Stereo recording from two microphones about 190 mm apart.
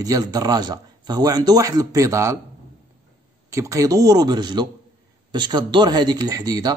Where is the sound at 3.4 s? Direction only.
15° right (ahead or behind).